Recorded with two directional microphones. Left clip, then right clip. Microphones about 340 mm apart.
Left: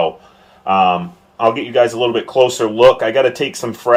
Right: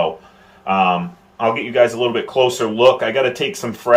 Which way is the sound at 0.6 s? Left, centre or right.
Left.